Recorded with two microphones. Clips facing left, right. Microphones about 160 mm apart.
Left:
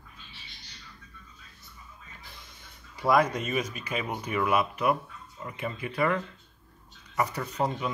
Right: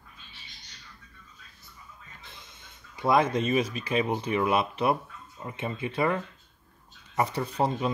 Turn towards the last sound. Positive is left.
turn(degrees=-30)  # may be behind; listen again after turning